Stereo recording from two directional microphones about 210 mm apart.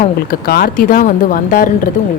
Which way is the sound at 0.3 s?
45° left (ahead or behind).